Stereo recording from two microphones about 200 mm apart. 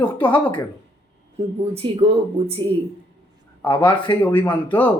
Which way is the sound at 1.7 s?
30° right (ahead or behind).